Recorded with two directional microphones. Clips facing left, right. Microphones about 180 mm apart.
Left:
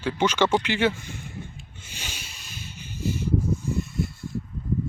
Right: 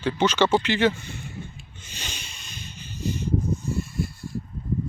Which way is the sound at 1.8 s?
10° left (ahead or behind).